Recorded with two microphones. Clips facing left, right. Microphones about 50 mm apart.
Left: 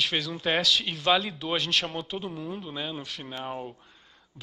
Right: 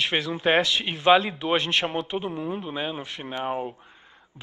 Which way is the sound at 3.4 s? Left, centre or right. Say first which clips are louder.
Right 7 dB; right.